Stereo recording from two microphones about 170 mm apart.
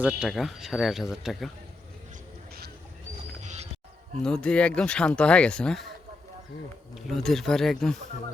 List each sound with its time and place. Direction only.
0.0 s speech: 5° right (ahead or behind)
3.4 s music: 45° right (ahead or behind)
4.2 s speech: 5° left (ahead or behind)
6.9 s speech: centre (ahead or behind)